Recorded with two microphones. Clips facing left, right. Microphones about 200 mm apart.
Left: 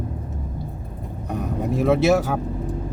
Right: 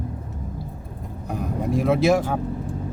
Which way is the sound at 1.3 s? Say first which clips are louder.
Even; centre (ahead or behind).